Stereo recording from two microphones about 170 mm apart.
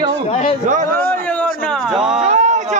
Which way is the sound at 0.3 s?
40° left (ahead or behind).